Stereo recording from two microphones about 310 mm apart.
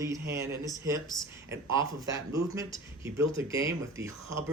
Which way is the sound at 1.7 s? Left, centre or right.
Centre.